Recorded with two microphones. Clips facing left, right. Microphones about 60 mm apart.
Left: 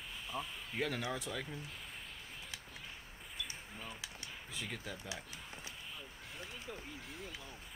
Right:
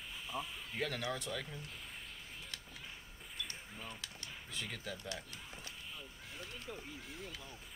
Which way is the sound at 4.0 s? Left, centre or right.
Centre.